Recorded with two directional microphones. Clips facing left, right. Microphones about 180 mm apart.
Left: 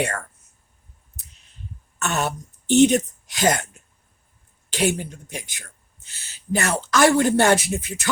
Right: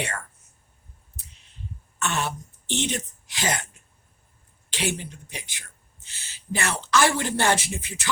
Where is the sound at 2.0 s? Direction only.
45° left (ahead or behind).